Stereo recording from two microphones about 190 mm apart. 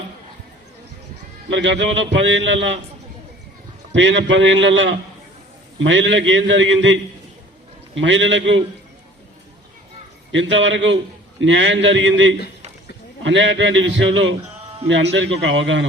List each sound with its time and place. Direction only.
1.5 s a man's voice: 70° right (ahead or behind)
3.9 s a man's voice: 75° right (ahead or behind)
10.3 s a man's voice: 75° right (ahead or behind)